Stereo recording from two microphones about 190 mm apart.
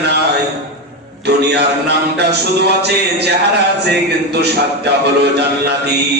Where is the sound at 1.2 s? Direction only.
60° right (ahead or behind).